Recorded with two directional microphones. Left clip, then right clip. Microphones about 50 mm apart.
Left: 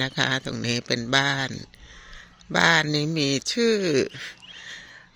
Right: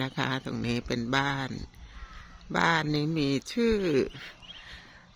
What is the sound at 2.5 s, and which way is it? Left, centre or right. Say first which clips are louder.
Speech: left 6 dB; left.